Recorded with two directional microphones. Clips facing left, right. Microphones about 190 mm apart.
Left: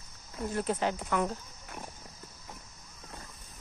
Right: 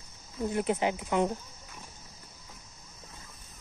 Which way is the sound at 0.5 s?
20° right (ahead or behind).